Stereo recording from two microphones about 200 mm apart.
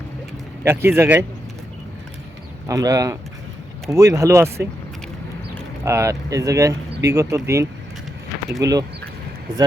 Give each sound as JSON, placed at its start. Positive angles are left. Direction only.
{"t": 0.6, "sound": "speech", "side_deg": -10}
{"t": 2.6, "sound": "speech", "side_deg": -15}
{"t": 5.8, "sound": "speech", "side_deg": -15}